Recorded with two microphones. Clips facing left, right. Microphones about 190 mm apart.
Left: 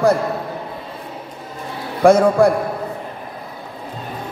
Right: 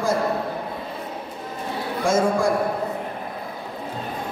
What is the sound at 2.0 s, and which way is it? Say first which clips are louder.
Speech: left 9 dB; 65° left (ahead or behind).